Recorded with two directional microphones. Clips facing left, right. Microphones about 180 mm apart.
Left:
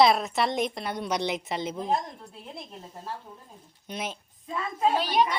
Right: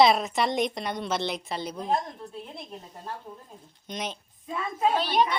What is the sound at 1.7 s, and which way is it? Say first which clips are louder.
Speech: right 1 dB; centre (ahead or behind).